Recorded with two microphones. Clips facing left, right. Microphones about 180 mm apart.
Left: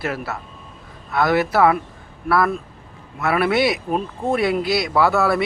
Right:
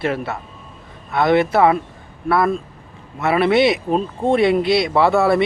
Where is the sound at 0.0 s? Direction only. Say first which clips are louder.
Right 4 dB; 25° right (ahead or behind).